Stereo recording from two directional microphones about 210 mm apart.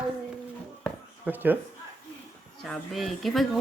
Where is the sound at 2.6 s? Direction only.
Centre (ahead or behind).